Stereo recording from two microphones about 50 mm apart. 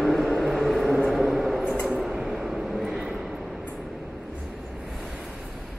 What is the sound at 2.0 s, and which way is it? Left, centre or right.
Vehicle, centre.